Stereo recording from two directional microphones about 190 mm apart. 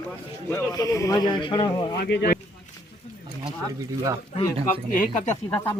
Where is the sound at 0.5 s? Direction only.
20° left (ahead or behind).